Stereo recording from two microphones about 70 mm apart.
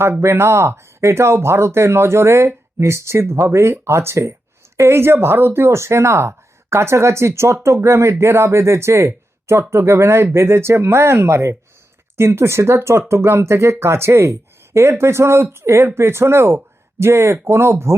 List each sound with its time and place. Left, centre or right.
0.0 s speech: right